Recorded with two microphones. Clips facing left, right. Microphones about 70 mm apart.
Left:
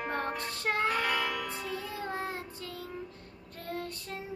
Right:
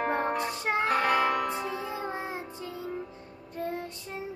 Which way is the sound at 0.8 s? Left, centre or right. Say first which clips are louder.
Right 8 dB; right.